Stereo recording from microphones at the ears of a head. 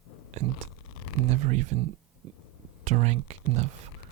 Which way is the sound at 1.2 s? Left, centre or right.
Right.